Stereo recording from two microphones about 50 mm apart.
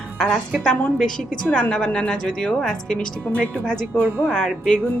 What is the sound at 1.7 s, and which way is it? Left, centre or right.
A woman's voice, centre.